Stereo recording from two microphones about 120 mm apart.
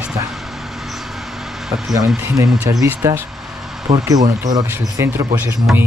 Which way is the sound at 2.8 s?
20° right (ahead or behind).